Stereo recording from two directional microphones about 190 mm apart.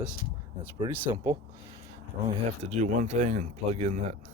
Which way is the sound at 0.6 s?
15° right (ahead or behind).